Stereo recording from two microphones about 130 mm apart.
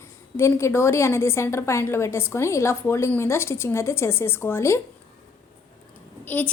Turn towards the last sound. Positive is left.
turn(degrees=15)  # may be behind; listen again after turning